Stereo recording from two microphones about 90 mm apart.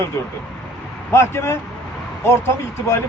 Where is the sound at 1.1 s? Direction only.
30° left (ahead or behind).